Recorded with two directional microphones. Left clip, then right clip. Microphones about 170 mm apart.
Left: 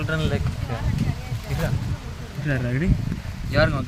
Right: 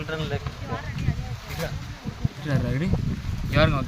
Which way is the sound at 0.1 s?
15° left (ahead or behind).